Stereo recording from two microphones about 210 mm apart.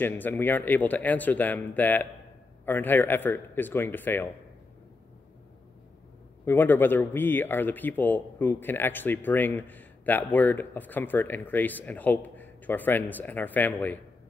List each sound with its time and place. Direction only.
0.0 s speech: 10° left (ahead or behind)
6.4 s speech: 10° left (ahead or behind)